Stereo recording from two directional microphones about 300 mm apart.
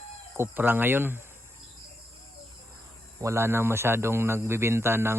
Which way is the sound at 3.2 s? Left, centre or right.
Centre.